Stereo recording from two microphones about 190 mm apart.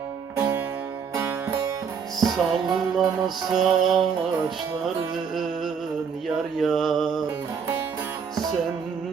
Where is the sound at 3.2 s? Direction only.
Centre (ahead or behind).